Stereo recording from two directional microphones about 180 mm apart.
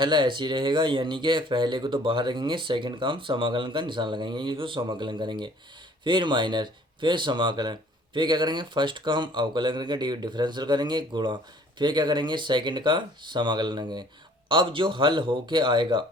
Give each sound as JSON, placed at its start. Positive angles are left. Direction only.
{"t": 0.0, "sound": "speech", "side_deg": -25}